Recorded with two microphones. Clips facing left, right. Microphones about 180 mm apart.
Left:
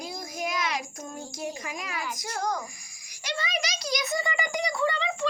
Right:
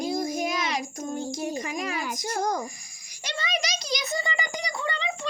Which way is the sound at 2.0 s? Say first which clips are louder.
Right 3 dB; 45° right (ahead or behind).